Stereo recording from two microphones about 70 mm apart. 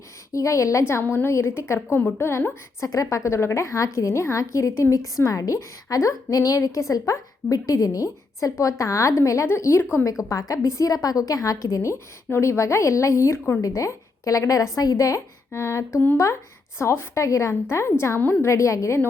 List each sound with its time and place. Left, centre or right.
0.3 s a woman's voice: left
1.0 s a woman's voice: left
2.0 s a woman's voice: left
2.8 s a woman's voice: left
7.5 s a woman's voice: left
17.2 s a woman's voice: left
17.5 s a woman's voice: left